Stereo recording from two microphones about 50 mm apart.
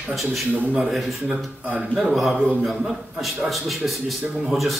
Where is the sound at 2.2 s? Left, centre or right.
Right.